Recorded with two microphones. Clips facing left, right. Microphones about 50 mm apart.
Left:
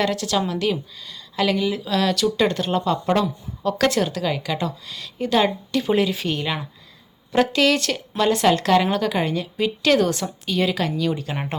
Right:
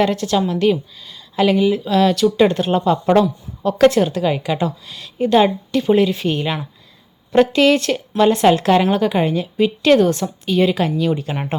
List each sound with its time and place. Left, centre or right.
0.0 s a woman's voice: centre
5.8 s a woman's voice: centre
8.4 s a woman's voice: centre